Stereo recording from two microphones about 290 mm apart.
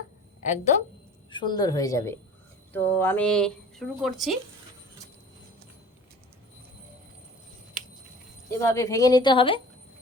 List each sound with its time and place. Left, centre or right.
0.4 s a woman's voice: left; by 4.4 s centre
8.4 s a woman's voice: centre